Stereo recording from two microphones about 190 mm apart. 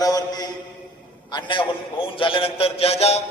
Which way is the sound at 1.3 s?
25° left (ahead or behind).